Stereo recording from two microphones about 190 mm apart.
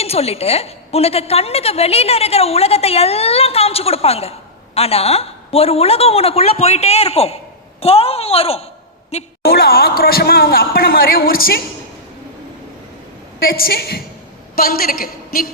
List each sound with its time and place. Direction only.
0.0 s a woman's voice: 30° left (ahead or behind)
9.4 s speech: 55° left (ahead or behind)
13.4 s a woman's voice: 50° left (ahead or behind)